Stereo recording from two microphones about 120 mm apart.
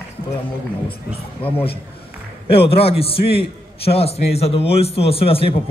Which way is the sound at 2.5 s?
50° left (ahead or behind).